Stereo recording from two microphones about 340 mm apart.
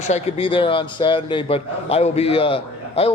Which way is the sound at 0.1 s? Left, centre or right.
Centre.